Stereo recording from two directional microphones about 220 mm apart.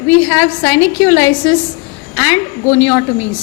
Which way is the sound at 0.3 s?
10° left (ahead or behind).